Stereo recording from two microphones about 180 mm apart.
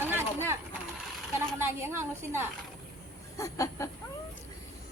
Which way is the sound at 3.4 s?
15° left (ahead or behind).